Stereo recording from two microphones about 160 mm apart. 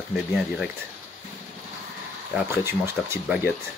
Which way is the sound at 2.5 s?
15° right (ahead or behind).